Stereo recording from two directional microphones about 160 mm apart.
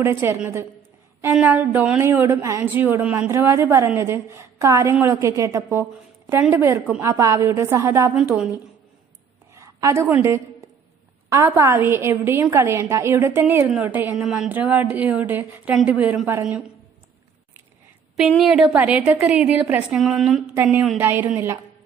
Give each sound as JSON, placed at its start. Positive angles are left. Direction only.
{"t": 0.0, "sound": "a woman's voice", "side_deg": -15}
{"t": 9.6, "sound": "a woman's voice", "side_deg": -20}
{"t": 18.4, "sound": "a woman's voice", "side_deg": -5}
{"t": 21.0, "sound": "a woman's voice", "side_deg": -15}